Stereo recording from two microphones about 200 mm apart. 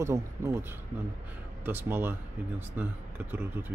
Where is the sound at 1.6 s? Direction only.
10° right (ahead or behind).